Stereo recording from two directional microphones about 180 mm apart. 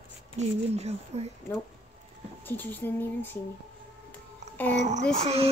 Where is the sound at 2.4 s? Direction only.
10° left (ahead or behind).